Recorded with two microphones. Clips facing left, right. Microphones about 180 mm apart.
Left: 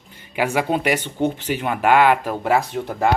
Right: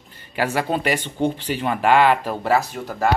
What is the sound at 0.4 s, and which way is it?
Speech, 10° left (ahead or behind).